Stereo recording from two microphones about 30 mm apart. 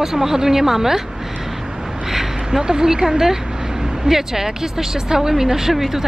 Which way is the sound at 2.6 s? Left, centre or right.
Right.